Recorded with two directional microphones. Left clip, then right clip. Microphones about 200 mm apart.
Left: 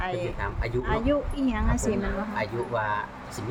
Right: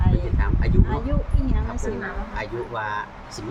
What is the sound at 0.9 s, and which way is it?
Speech, 50° left (ahead or behind).